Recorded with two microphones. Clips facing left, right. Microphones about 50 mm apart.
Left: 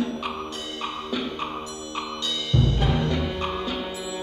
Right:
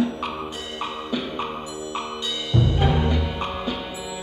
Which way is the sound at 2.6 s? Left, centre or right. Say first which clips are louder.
Right 3 dB; centre.